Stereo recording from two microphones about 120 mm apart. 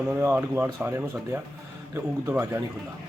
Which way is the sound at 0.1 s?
15° right (ahead or behind).